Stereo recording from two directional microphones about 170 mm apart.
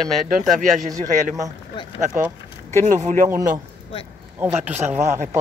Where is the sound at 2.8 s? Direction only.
45° right (ahead or behind).